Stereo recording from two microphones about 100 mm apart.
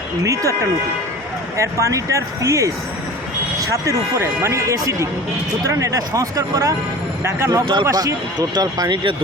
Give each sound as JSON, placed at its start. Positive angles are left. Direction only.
{"t": 0.2, "sound": "speech", "side_deg": -30}
{"t": 7.6, "sound": "speech", "side_deg": -55}
{"t": 7.9, "sound": "speech", "side_deg": -40}